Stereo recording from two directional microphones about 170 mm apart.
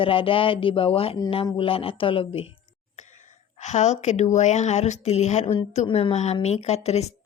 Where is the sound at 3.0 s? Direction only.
45° left (ahead or behind).